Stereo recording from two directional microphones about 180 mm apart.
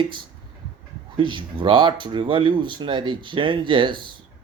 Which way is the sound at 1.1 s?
30° right (ahead or behind).